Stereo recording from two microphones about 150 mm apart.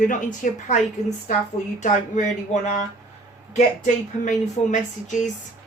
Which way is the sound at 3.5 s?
55° left (ahead or behind).